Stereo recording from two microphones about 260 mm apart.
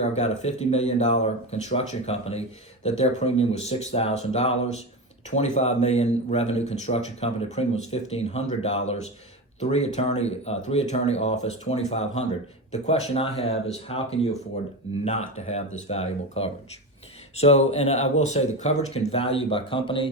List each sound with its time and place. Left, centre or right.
0.2 s speech: left